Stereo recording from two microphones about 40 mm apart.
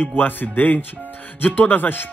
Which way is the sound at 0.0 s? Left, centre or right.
Left.